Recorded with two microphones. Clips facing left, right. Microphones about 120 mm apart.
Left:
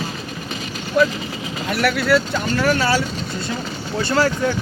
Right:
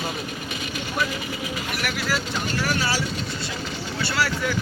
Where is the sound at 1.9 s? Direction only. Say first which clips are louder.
Left 9 dB; 60° left (ahead or behind).